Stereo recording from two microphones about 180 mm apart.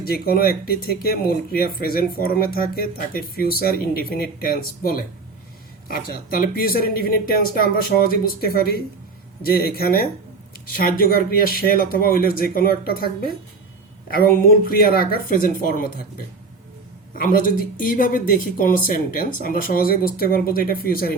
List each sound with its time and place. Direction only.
0.0 s speech: 55° left (ahead or behind)
6.3 s speech: 50° left (ahead or behind)
14.1 s speech: 55° left (ahead or behind)